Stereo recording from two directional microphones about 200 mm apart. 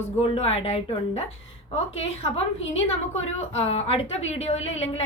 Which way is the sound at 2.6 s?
70° left (ahead or behind).